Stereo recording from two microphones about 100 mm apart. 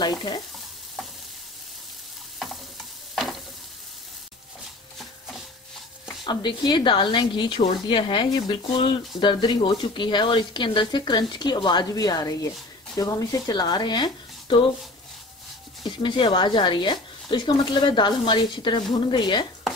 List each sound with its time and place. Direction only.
0.0 s a woman's voice: 45° left (ahead or behind)
2.3 s stir: centre (ahead or behind)
6.2 s a woman's voice: 50° left (ahead or behind)
16.0 s a woman's voice: 55° left (ahead or behind)